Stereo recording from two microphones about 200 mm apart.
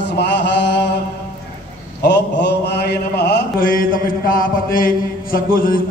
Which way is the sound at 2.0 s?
55° left (ahead or behind).